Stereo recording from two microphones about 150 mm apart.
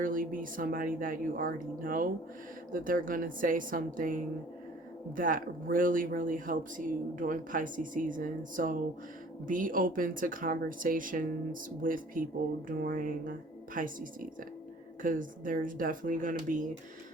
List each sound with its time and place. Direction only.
0.0 s speech: 65° right (ahead or behind)